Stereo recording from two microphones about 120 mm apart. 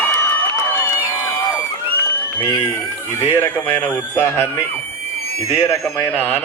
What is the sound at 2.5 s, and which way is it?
A man's voice, 25° left (ahead or behind).